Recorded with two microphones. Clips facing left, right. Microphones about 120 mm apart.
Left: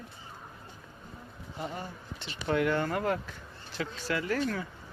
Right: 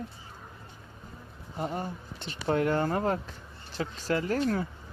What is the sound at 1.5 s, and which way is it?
Speech, 45° right (ahead or behind).